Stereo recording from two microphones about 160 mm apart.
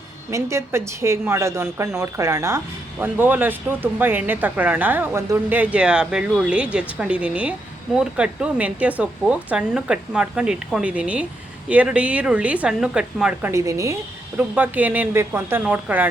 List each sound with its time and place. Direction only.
0.3 s speech: 20° right (ahead or behind)
13.5 s a woman's voice: 20° right (ahead or behind)